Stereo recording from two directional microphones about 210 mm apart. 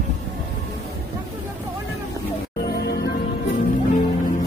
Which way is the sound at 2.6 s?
50° left (ahead or behind).